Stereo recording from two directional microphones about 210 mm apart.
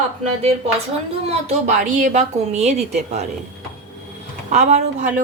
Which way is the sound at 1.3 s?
30° right (ahead or behind).